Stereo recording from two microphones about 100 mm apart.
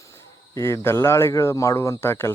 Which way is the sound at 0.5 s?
30° left (ahead or behind).